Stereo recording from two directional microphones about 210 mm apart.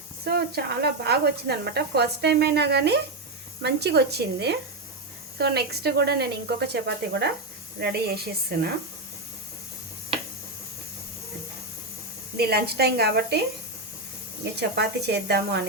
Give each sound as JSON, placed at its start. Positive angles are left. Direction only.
{"t": 0.3, "sound": "speech", "side_deg": -50}
{"t": 12.4, "sound": "speech", "side_deg": -50}
{"t": 14.6, "sound": "speech", "side_deg": -50}